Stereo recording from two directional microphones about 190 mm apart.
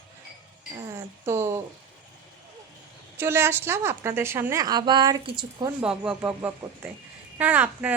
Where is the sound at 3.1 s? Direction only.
15° right (ahead or behind).